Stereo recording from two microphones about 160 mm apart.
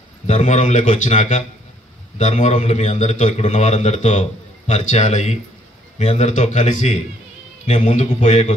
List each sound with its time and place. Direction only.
0.3 s a man's voice: 50° left (ahead or behind)